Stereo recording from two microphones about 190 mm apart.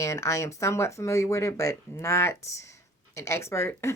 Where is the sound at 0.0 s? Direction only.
15° left (ahead or behind).